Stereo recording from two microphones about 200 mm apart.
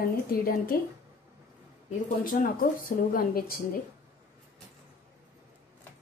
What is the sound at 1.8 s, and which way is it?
A woman's voice, 40° left (ahead or behind).